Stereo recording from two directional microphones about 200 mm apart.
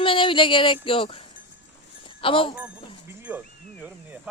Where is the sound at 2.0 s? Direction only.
25° left (ahead or behind).